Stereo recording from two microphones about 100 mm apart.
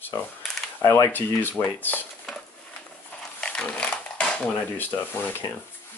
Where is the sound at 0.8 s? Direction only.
30° left (ahead or behind).